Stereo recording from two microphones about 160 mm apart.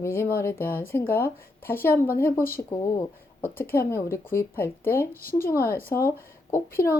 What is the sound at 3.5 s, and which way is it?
Speech, 15° left (ahead or behind).